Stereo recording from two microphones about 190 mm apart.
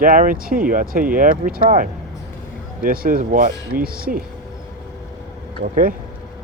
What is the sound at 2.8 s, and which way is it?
Speech, 50° right (ahead or behind).